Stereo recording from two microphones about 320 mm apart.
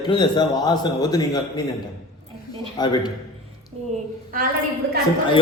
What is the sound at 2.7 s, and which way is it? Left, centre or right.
Speech, centre.